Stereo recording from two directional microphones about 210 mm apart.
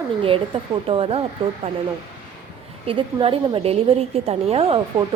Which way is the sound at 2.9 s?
25° right (ahead or behind).